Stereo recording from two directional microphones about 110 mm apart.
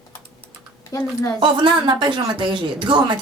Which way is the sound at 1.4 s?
45° right (ahead or behind).